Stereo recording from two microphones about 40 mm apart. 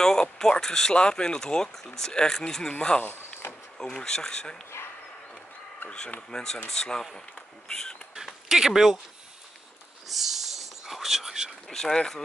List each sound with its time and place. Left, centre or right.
0.0 s speech: centre
3.0 s a sound: left
3.9 s speech: centre
5.9 s speech: left
6.3 s speech: centre
8.2 s a sound: centre
10.0 s whispering: centre
11.7 s speech: centre